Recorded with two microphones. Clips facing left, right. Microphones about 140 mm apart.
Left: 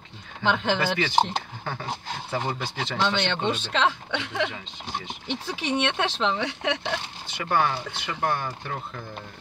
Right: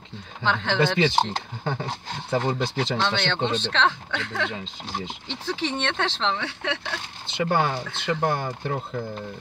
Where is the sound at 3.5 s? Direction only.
10° left (ahead or behind).